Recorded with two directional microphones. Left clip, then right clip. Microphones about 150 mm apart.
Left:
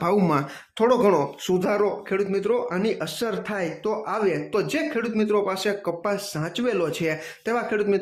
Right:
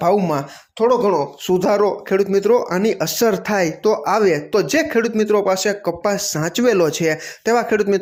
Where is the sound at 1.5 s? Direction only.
25° right (ahead or behind).